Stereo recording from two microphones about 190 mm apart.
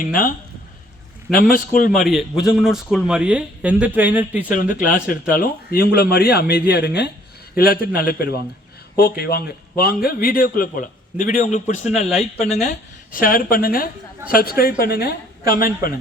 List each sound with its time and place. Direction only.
0.0 s a man's voice: 45° left (ahead or behind)
2.0 s speech: centre (ahead or behind)
4.9 s a man's voice: 45° left (ahead or behind)
13.1 s a man's voice: 45° left (ahead or behind)